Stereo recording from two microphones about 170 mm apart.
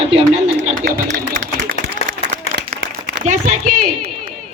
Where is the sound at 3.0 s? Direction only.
45° right (ahead or behind).